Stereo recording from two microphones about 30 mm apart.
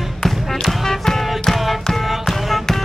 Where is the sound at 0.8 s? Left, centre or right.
Centre.